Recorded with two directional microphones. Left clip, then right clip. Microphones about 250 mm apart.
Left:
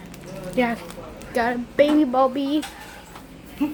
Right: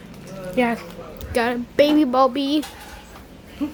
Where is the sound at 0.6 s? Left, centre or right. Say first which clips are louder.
Right 2 dB; centre.